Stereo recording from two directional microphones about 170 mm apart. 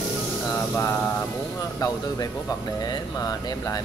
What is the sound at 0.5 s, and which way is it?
Speech, 15° left (ahead or behind).